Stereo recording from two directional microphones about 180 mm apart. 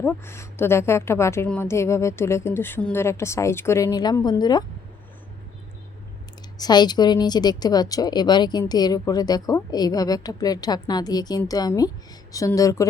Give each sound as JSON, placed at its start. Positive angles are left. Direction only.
{"t": 0.0, "sound": "a woman's voice", "side_deg": 15}
{"t": 6.6, "sound": "a woman's voice", "side_deg": 25}